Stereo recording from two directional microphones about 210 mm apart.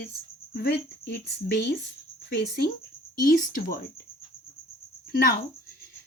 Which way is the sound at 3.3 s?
40° left (ahead or behind).